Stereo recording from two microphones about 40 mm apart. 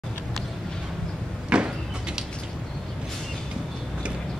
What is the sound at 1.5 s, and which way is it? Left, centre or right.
Sliding door, right.